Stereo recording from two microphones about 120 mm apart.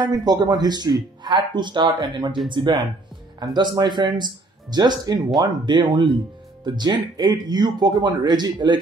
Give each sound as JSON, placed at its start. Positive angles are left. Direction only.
{"t": 0.0, "sound": "speech", "side_deg": -35}